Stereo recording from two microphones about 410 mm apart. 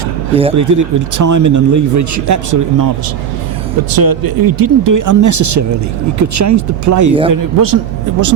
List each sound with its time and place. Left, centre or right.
0.5 s speech: right
3.9 s speech: right
7.1 s speech: centre
7.3 s speech: right